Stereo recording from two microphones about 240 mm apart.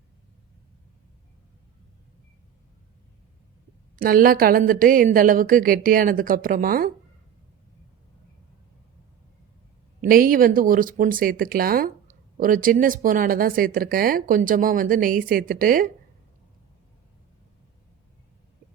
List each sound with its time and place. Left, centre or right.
3.9 s speech: right
10.0 s speech: right